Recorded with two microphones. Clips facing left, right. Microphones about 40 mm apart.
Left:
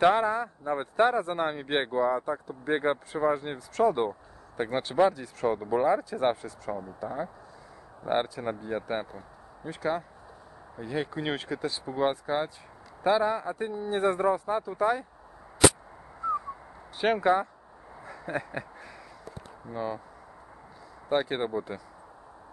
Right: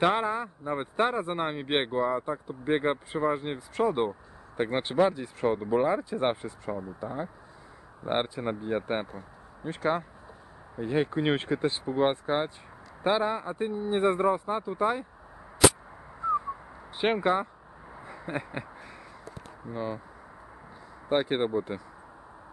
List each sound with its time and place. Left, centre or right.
0.1 s speech: right
16.2 s owl: right
16.9 s speech: right
18.0 s a sound: right
19.7 s speech: centre
21.1 s speech: right